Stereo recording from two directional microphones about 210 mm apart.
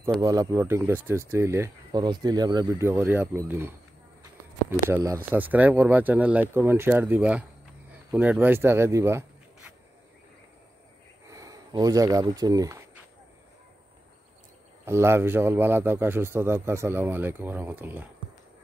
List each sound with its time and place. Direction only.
0.2 s speech: 15° right (ahead or behind)
11.2 s speech: 15° right (ahead or behind)
14.9 s speech: 10° right (ahead or behind)